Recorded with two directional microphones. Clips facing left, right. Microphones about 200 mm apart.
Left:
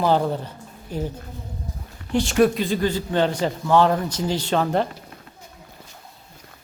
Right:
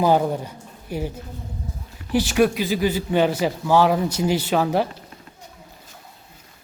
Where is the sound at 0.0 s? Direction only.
10° right (ahead or behind).